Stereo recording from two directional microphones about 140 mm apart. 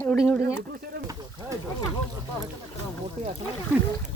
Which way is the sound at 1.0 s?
25° right (ahead or behind).